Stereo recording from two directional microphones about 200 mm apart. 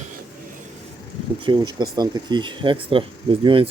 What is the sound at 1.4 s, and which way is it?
Speech, 20° right (ahead or behind).